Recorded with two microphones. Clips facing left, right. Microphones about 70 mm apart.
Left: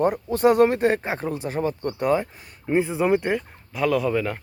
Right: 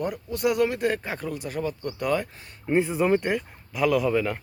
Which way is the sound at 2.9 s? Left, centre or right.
Centre.